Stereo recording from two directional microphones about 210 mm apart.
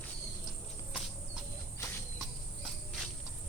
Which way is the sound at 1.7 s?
10° left (ahead or behind).